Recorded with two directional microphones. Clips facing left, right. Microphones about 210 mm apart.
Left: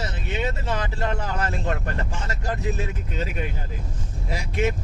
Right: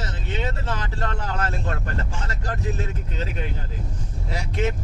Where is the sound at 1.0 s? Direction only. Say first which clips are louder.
Left 1 dB; 10° left (ahead or behind).